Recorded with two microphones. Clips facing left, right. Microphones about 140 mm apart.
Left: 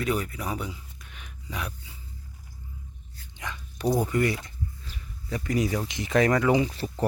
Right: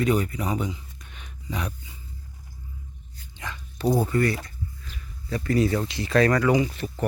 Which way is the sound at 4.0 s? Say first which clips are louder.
Right 2 dB; 15° left (ahead or behind).